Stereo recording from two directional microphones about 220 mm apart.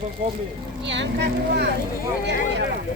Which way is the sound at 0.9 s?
50° right (ahead or behind).